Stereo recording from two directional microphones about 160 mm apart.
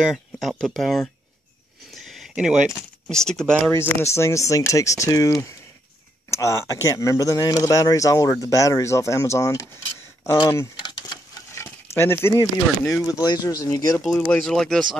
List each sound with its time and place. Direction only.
0.0 s speech: centre (ahead or behind)
2.0 s a sound: centre (ahead or behind)
3.3 s speech: 5° left (ahead or behind)
3.7 s speech: 15° left (ahead or behind)
6.3 s speech: 15° left (ahead or behind)
10.8 s a sound: 25° left (ahead or behind)
11.5 s speech: 15° left (ahead or behind)
14.0 s speech: 5° left (ahead or behind)